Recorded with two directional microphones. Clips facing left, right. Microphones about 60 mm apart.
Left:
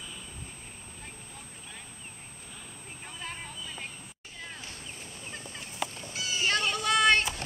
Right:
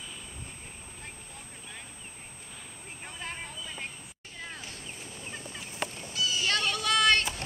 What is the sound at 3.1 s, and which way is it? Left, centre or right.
Vehicle, right.